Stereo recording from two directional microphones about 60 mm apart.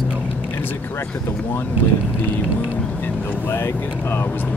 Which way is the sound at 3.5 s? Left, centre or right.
Left.